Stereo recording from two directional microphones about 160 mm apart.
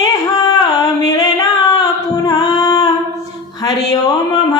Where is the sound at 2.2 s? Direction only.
25° left (ahead or behind).